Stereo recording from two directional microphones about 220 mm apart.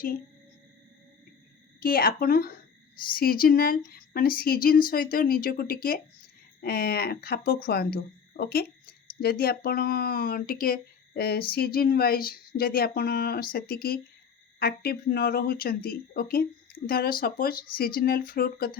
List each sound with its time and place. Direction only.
1.8 s speech: 40° left (ahead or behind)